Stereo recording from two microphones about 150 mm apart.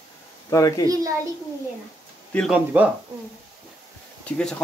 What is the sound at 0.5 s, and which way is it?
Speech, 20° left (ahead or behind).